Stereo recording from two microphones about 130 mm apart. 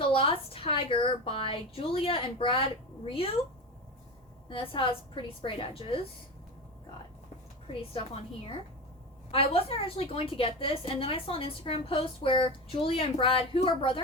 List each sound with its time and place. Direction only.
0.0 s a woman's voice: 45° left (ahead or behind)
4.4 s a woman's voice: 40° left (ahead or behind)
7.7 s a woman's voice: 45° left (ahead or behind)
9.3 s a woman's voice: 45° left (ahead or behind)